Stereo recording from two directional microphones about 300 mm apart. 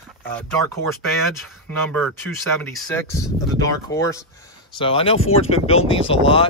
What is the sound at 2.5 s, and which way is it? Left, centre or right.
Speech, centre.